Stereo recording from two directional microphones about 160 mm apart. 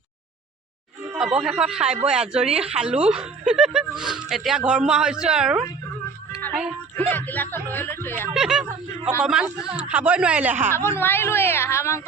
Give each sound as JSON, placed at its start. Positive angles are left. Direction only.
{"t": 1.1, "sound": "speech", "side_deg": -5}
{"t": 6.9, "sound": "speech", "side_deg": 10}
{"t": 8.3, "sound": "speech", "side_deg": -5}
{"t": 10.8, "sound": "speech", "side_deg": 15}